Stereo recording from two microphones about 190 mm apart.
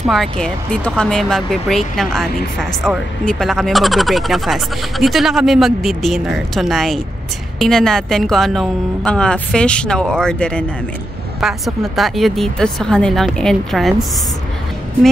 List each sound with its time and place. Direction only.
0.1 s speech: centre (ahead or behind)